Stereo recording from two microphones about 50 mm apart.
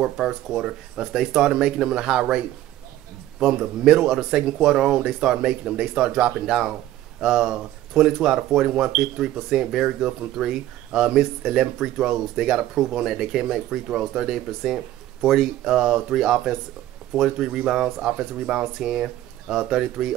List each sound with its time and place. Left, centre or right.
0.2 s speech: centre